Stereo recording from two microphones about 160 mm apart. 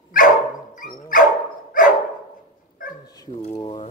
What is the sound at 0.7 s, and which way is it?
Dog, 60° left (ahead or behind).